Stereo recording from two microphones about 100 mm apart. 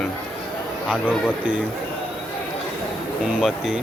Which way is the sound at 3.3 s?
5° right (ahead or behind).